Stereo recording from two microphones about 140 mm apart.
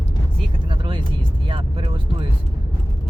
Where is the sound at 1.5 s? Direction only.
40° right (ahead or behind).